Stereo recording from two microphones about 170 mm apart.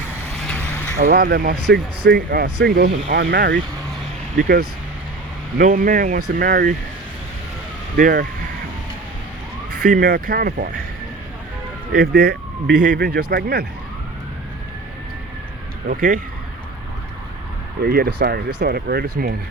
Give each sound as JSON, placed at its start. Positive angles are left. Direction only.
{"t": 0.3, "sound": "vehicle", "side_deg": 5}
{"t": 0.9, "sound": "speech", "side_deg": -55}
{"t": 3.1, "sound": "speech", "side_deg": -90}
{"t": 4.4, "sound": "speech", "side_deg": -60}
{"t": 7.9, "sound": "speech", "side_deg": -55}
{"t": 9.8, "sound": "speech", "side_deg": -50}
{"t": 11.9, "sound": "speech", "side_deg": -70}
{"t": 15.9, "sound": "speech", "side_deg": -50}
{"t": 17.8, "sound": "speech", "side_deg": -70}